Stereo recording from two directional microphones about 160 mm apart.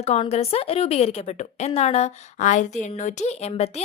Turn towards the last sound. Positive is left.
turn(degrees=40)  # may be behind; listen again after turning